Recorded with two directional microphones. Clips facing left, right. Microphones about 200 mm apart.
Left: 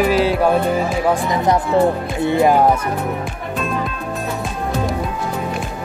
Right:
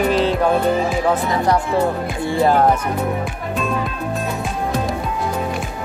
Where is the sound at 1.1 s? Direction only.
20° left (ahead or behind).